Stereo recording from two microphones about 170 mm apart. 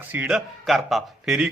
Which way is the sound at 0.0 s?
10° right (ahead or behind).